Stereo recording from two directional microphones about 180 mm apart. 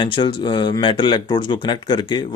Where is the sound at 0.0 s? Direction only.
25° left (ahead or behind).